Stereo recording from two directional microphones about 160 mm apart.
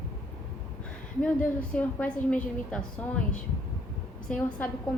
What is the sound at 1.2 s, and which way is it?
A woman's voice, 10° left (ahead or behind).